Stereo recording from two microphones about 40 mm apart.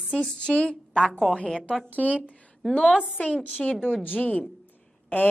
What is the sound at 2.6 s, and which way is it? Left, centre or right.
Speech, centre.